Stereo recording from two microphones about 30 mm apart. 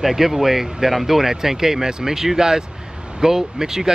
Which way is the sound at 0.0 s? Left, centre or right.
Centre.